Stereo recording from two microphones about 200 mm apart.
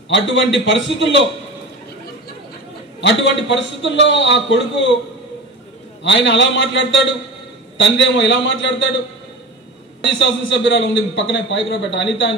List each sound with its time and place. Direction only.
0.1 s a man's voice: 65° left (ahead or behind)
3.0 s a man's voice: 65° left (ahead or behind)
6.0 s a man's voice: 60° left (ahead or behind)
10.1 s a man's voice: 65° left (ahead or behind)